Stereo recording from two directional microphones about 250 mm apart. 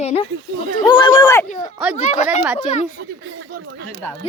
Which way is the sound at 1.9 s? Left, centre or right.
Left.